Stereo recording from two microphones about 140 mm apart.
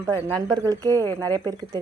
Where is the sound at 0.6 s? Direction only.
25° right (ahead or behind).